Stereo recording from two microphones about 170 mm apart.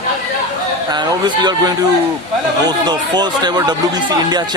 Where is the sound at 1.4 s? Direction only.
25° right (ahead or behind).